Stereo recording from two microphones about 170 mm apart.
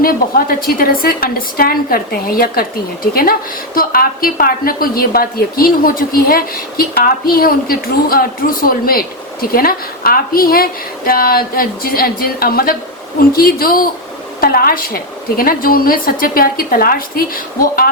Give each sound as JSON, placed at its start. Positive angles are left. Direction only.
{"t": 0.0, "sound": "a woman's voice", "side_deg": 60}